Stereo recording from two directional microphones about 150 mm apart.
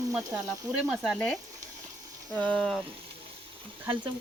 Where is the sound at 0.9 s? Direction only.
Centre (ahead or behind).